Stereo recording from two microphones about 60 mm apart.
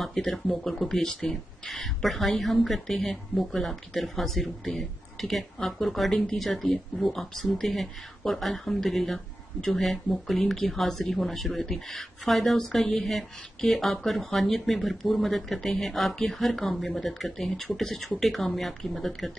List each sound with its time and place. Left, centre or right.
0.0 s speech: centre